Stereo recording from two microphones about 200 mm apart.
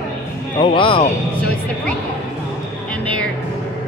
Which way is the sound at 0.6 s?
25° left (ahead or behind).